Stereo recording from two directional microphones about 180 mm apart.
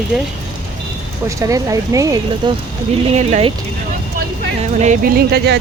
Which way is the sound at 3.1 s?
35° right (ahead or behind).